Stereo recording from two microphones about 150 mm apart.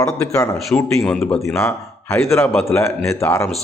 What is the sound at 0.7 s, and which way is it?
Speech, 5° left (ahead or behind).